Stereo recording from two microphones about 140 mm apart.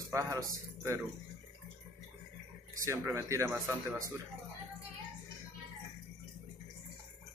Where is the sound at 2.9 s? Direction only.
20° right (ahead or behind).